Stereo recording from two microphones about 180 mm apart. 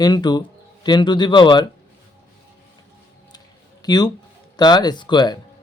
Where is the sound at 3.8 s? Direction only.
20° left (ahead or behind).